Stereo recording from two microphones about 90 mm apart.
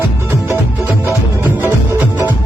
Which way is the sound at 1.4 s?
20° right (ahead or behind).